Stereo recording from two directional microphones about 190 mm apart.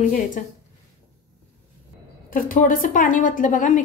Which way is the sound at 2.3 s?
45° left (ahead or behind).